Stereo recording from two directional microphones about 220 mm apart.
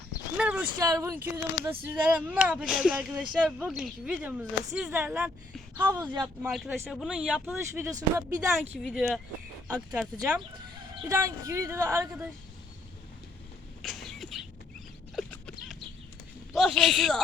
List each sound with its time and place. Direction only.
0.3 s speech: 5° right (ahead or behind)
5.7 s speech: 15° right (ahead or behind)
6.4 s speech: 5° right (ahead or behind)
8.8 s speech: centre (ahead or behind)
13.8 s a sound: centre (ahead or behind)
15.1 s zipper: centre (ahead or behind)
16.5 s speech: centre (ahead or behind)